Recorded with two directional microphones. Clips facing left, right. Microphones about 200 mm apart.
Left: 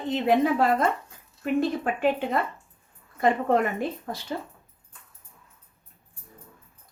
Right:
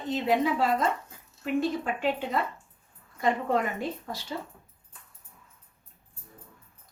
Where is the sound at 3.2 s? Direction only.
55° left (ahead or behind).